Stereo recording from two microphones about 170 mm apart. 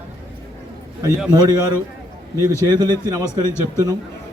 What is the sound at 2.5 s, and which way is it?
Speech, 25° right (ahead or behind).